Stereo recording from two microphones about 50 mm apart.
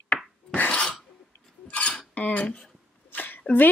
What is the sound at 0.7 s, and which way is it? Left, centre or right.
Throat clearing, centre.